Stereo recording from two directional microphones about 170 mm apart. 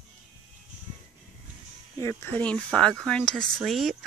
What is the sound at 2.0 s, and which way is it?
Speech, 10° left (ahead or behind).